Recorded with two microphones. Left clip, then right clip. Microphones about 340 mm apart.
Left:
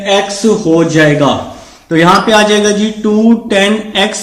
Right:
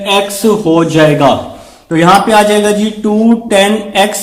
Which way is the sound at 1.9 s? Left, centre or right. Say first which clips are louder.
Right 1 dB; centre.